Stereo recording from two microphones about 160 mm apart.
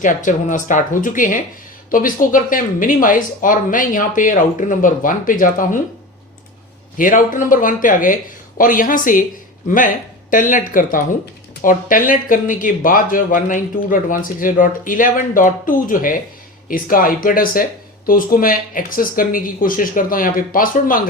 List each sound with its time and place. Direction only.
0.0 s speech: 55° left (ahead or behind)
6.9 s speech: 55° left (ahead or behind)